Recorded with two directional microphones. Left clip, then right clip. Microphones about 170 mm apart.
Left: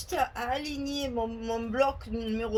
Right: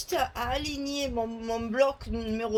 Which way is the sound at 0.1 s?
45° right (ahead or behind).